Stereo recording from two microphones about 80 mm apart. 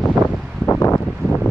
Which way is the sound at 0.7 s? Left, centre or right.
Left.